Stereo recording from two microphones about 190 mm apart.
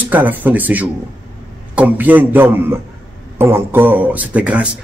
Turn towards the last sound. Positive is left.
turn(degrees=-5)  # may be behind; listen again after turning